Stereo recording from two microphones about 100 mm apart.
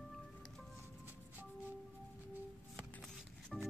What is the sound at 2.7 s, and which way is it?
Music, 10° left (ahead or behind).